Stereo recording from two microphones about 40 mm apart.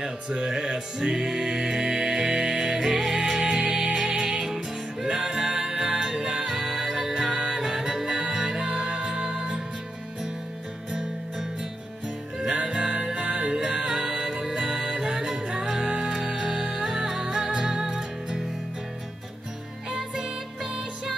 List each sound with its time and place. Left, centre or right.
0.0 s music: centre
10.9 s music: centre
12.6 s music: centre
19.9 s music: centre